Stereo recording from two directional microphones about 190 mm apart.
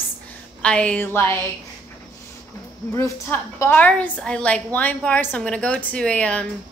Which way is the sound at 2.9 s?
15° left (ahead or behind).